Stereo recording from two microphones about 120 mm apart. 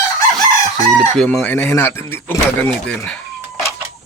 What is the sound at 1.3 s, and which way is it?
Speech, 15° left (ahead or behind).